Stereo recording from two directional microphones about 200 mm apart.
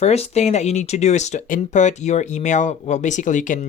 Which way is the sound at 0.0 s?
30° left (ahead or behind).